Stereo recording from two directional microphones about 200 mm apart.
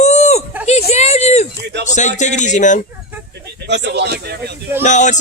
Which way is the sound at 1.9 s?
35° left (ahead or behind).